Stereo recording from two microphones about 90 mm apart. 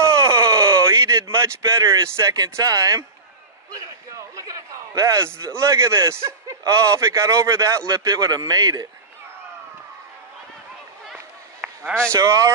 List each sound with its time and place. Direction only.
0.0 s a sound: 35° right (ahead or behind)
1.4 s a man's voice: 35° right (ahead or behind)
12.1 s a man's voice: 35° right (ahead or behind)